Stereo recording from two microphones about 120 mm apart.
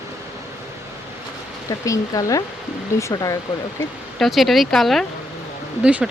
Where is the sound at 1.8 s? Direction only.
25° left (ahead or behind).